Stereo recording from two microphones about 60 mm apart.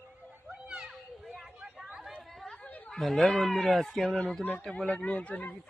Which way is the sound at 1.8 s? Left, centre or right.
Centre.